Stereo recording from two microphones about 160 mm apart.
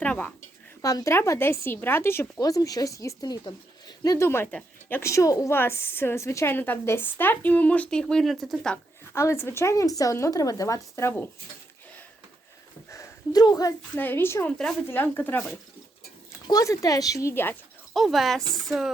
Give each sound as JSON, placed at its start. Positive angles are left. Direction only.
{"t": 0.0, "sound": "a woman's voice", "side_deg": 10}
{"t": 0.8, "sound": "a woman's voice", "side_deg": 20}
{"t": 9.1, "sound": "a woman's voice", "side_deg": 15}
{"t": 12.9, "sound": "a sound", "side_deg": 20}
{"t": 13.9, "sound": "a woman's voice", "side_deg": 10}
{"t": 17.9, "sound": "speech", "side_deg": 0}